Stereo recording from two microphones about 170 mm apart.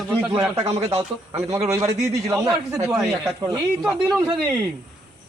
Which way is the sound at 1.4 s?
15° right (ahead or behind).